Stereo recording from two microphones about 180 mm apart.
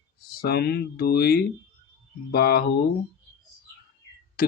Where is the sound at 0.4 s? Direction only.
60° left (ahead or behind).